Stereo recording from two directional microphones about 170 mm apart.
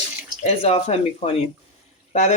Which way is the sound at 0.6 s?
35° left (ahead or behind).